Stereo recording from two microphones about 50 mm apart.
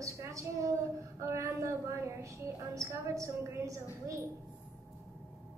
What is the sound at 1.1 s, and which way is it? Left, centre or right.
A woman's voice, right.